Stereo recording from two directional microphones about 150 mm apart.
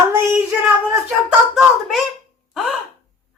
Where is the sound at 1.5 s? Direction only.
Centre (ahead or behind).